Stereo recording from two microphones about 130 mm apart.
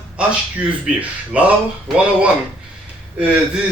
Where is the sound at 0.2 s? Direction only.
10° right (ahead or behind).